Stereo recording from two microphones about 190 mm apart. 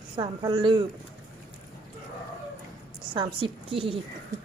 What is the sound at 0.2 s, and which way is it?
Speech, 25° right (ahead or behind).